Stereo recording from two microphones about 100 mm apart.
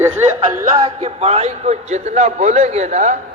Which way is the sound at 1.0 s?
90° right.